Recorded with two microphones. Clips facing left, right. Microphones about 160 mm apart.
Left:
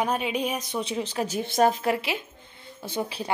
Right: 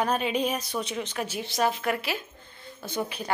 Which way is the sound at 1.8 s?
25° left (ahead or behind).